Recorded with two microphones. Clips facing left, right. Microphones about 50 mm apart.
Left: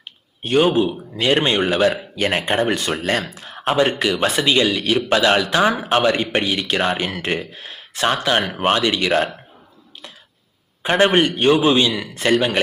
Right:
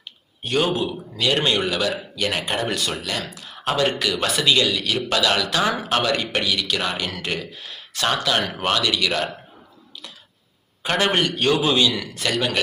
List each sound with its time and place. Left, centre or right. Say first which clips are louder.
0.0 s a man's voice: left 3 dB; left
10.8 s a man's voice: left 5 dB; left